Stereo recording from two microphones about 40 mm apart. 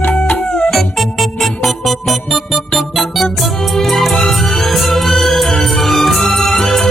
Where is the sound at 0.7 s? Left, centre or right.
Centre.